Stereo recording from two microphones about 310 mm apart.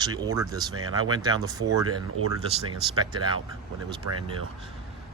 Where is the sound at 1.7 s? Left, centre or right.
Right.